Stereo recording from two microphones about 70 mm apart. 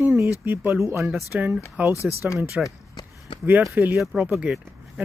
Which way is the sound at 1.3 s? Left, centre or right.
Right.